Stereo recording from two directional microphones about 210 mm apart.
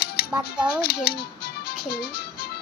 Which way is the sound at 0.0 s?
50° left (ahead or behind).